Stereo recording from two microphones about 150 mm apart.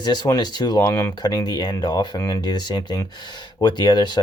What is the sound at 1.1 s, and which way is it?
Speech, 30° left (ahead or behind).